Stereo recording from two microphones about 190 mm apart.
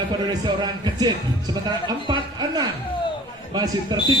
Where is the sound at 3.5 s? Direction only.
20° right (ahead or behind).